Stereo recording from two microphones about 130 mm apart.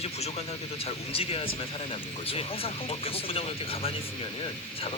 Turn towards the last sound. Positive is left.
turn(degrees=45)  # may be behind; listen again after turning